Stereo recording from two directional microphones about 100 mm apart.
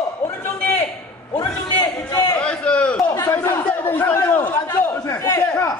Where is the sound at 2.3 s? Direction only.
10° left (ahead or behind).